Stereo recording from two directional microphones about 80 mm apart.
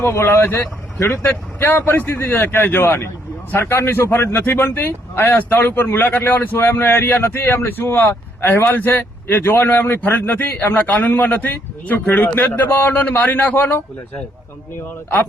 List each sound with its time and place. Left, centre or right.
0.0 s speech: left